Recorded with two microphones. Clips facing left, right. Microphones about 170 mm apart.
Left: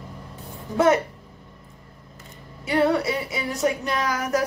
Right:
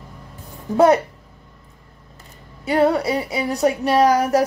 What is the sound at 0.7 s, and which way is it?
Speech, 35° right (ahead or behind).